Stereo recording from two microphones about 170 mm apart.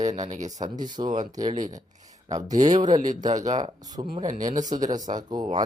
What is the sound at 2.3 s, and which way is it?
Speech, 20° right (ahead or behind).